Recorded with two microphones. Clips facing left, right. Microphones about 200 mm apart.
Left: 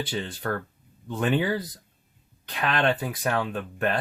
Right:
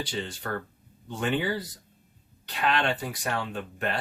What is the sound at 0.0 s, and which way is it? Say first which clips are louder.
Speech: left 3 dB; 55° left (ahead or behind).